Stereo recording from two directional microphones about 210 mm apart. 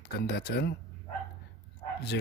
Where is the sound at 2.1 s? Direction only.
55° left (ahead or behind).